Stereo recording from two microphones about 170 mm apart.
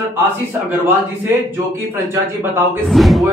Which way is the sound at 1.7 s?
15° right (ahead or behind).